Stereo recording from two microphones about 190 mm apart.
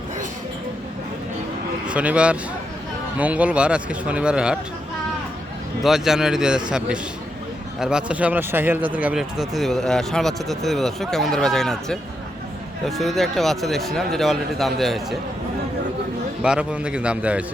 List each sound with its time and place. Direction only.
1.9 s speech: 5° right (ahead or behind)
5.8 s speech: centre (ahead or behind)
16.4 s speech: 5° right (ahead or behind)